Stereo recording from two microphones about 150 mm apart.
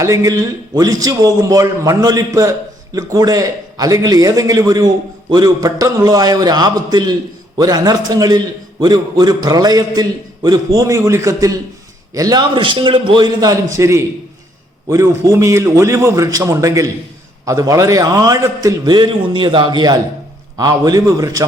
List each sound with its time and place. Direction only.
0.0 s a man's voice: 20° right (ahead or behind)